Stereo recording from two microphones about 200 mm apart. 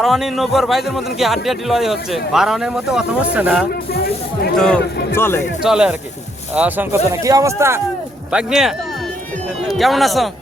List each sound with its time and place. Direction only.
0.0 s a man's voice: centre (ahead or behind)
3.7 s speech: 50° left (ahead or behind)
4.5 s a man's voice: 5° left (ahead or behind)
5.6 s a man's voice: 5° right (ahead or behind)